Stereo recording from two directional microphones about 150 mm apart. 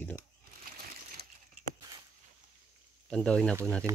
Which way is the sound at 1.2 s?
90° right.